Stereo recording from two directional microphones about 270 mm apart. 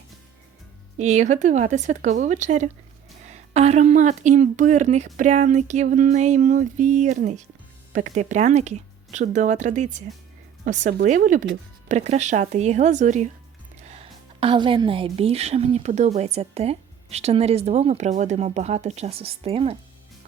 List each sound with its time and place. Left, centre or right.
0.9 s a woman's voice: right